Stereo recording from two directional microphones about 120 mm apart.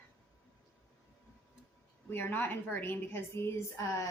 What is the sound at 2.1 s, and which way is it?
A woman's voice, 15° left (ahead or behind).